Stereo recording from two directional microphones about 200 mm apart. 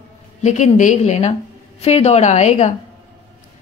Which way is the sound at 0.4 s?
35° left (ahead or behind).